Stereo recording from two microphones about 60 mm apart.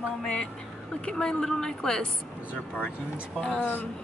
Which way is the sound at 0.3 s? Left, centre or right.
Centre.